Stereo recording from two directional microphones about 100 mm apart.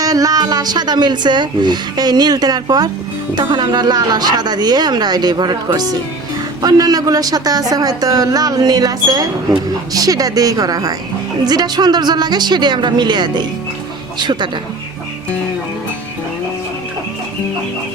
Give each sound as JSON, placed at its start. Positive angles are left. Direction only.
{"t": 0.0, "sound": "speech", "side_deg": -40}